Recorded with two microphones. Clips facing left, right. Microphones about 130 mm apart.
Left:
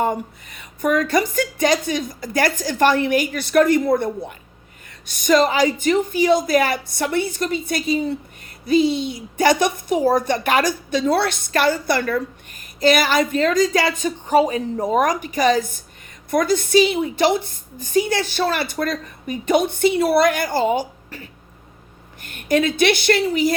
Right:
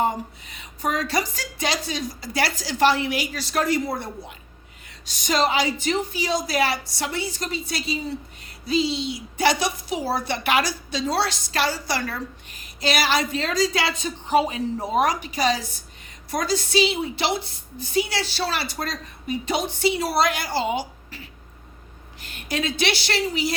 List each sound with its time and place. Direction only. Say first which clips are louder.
0.0 s a woman's voice: left 2 dB; 50° left (ahead or behind)